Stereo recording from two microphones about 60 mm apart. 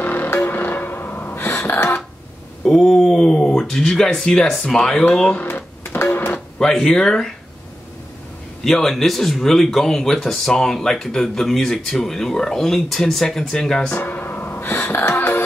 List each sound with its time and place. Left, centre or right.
0.0 s music: left
2.6 s speech: centre
5.4 s guitar: left
6.7 s speech: centre
8.6 s speech: centre
13.8 s music: left